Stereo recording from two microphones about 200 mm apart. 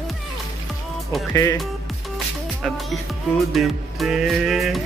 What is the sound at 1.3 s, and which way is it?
Speech, 15° left (ahead or behind).